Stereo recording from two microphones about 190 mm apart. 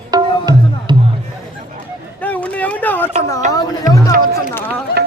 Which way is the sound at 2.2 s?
5° left (ahead or behind).